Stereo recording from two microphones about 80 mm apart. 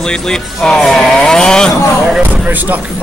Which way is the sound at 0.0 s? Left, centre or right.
Centre.